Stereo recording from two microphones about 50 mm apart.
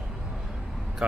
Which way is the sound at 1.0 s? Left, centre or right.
Right.